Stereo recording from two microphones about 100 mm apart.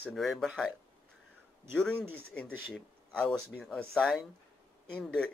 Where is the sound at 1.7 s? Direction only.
5° left (ahead or behind).